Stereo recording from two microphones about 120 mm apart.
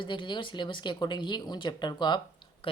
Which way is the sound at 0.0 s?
40° left (ahead or behind).